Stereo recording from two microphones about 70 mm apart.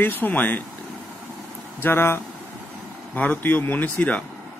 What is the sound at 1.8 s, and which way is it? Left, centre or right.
Speech, left.